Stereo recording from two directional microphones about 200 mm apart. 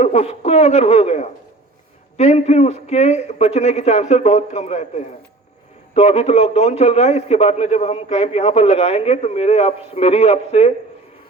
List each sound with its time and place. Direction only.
0.0 s a man's voice: 30° left (ahead or behind)